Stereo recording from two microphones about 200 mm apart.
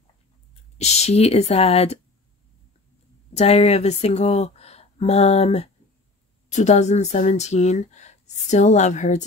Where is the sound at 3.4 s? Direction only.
30° left (ahead or behind).